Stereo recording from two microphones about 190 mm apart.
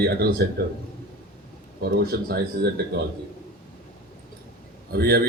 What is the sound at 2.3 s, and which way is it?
Speech, 55° right (ahead or behind).